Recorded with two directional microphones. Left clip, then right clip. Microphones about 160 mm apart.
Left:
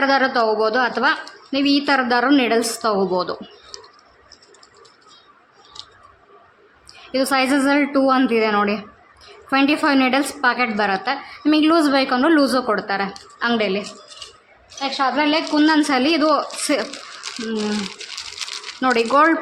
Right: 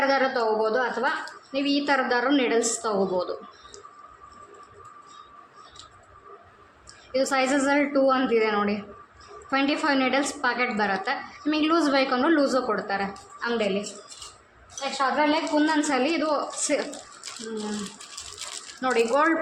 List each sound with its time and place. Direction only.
0.0 s a woman's voice: 50° left (ahead or behind)
1.5 s a woman's voice: 50° left (ahead or behind)
7.1 s a woman's voice: 45° left (ahead or behind); by 13.7 s 70° left (ahead or behind)
14.8 s a woman's voice: 65° left (ahead or behind)
17.2 s a sound: 15° left (ahead or behind)
18.8 s a woman's voice: 50° left (ahead or behind)